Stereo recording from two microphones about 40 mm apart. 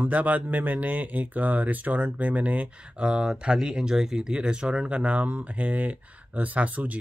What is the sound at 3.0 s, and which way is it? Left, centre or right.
Speech, right.